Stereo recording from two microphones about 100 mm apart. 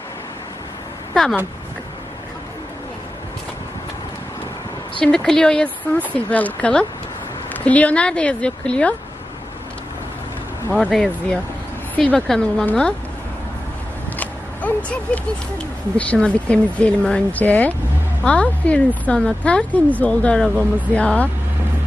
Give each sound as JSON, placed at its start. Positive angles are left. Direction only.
{"t": 1.1, "sound": "speech", "side_deg": 0}
{"t": 4.9, "sound": "speech", "side_deg": 5}
{"t": 10.7, "sound": "speech", "side_deg": -10}
{"t": 10.9, "sound": "speech", "side_deg": 5}
{"t": 14.2, "sound": "a sound", "side_deg": 15}
{"t": 16.0, "sound": "speech", "side_deg": 10}